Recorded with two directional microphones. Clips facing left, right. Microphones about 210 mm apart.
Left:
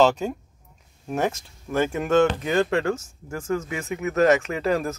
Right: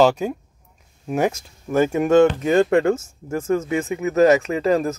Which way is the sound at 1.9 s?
15° right (ahead or behind).